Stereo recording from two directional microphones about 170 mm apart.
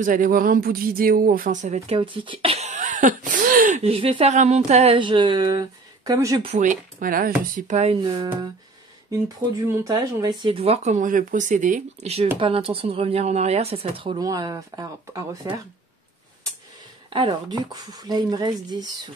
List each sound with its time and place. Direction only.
0.0 s speech: 55° right (ahead or behind)
2.0 s speech: 30° right (ahead or behind); by 3.9 s 45° right (ahead or behind)
3.9 s speech: 35° right (ahead or behind)
4.9 s speech: 30° right (ahead or behind)
6.4 s speech: 45° right (ahead or behind)
9.4 s speech: 10° right (ahead or behind)
9.8 s speech: 25° right (ahead or behind)
17.1 s speech: 30° right (ahead or behind)